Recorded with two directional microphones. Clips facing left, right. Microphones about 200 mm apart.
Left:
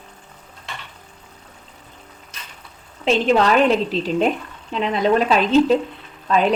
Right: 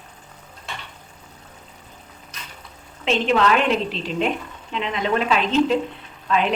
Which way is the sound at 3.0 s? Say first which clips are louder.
Left 3 dB; 40° left (ahead or behind).